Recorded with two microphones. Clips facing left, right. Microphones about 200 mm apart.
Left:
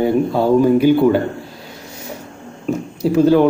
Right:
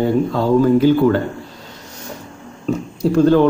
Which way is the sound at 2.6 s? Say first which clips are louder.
Even; 5° left (ahead or behind).